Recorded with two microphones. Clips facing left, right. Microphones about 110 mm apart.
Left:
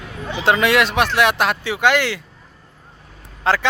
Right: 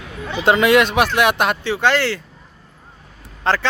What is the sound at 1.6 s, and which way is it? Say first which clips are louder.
Speech: left 1 dB; 10° left (ahead or behind).